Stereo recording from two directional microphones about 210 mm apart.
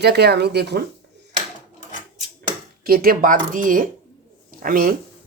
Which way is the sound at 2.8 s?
45° right (ahead or behind).